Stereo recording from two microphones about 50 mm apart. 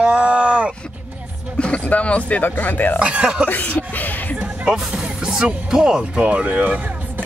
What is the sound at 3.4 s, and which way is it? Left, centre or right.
Speech, left.